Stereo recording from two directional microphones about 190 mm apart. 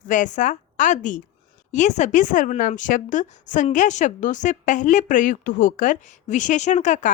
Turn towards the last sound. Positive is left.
turn(degrees=40)  # may be behind; listen again after turning